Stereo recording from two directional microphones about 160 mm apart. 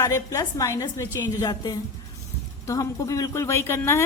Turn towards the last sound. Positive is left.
turn(degrees=15)  # may be behind; listen again after turning